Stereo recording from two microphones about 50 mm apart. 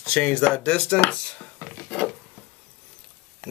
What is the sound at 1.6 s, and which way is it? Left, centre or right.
Wood, left.